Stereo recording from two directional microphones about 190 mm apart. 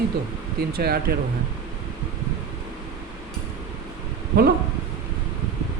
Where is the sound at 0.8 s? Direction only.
55° right (ahead or behind).